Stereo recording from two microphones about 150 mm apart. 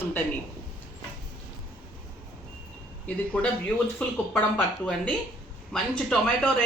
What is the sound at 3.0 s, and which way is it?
Speech, 10° left (ahead or behind).